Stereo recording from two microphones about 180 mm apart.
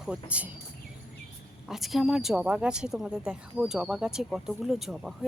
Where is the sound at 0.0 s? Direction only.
5° right (ahead or behind).